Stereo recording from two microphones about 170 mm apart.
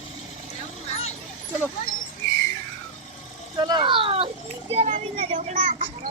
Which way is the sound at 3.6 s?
25° right (ahead or behind).